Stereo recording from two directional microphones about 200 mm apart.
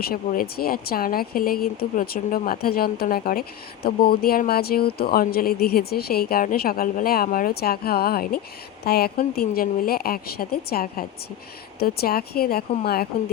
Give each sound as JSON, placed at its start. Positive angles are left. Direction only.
{"t": 0.0, "sound": "speech", "side_deg": 50}